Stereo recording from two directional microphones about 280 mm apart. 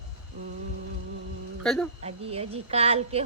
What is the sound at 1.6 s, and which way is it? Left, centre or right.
Speech, centre.